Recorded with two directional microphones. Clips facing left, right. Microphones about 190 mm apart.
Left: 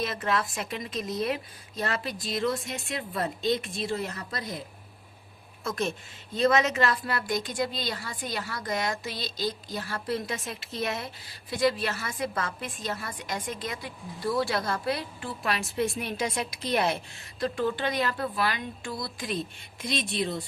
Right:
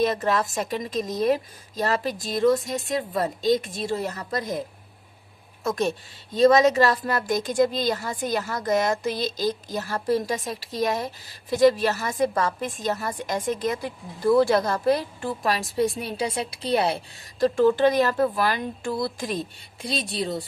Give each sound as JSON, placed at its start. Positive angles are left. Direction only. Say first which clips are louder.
{"t": 0.0, "sound": "a woman's voice", "louder": "right 6 dB", "side_deg": -40}
{"t": 6.3, "sound": "a woman's voice", "louder": "right 7 dB", "side_deg": -35}